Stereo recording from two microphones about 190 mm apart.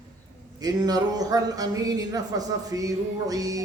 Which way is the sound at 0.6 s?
20° right (ahead or behind).